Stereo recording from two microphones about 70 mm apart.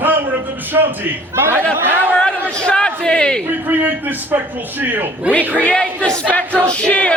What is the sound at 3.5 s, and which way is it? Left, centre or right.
A man's voice, right.